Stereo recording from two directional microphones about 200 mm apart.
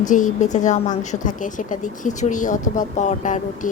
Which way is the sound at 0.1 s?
40° left (ahead or behind).